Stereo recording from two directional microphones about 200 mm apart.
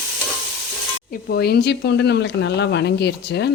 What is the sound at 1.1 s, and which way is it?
Speech, 50° left (ahead or behind).